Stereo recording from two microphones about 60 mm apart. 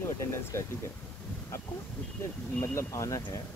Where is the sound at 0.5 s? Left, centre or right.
Left.